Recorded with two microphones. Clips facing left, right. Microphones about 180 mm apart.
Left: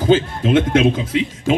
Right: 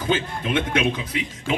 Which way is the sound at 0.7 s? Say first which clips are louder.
Left 8 dB; 45° left (ahead or behind).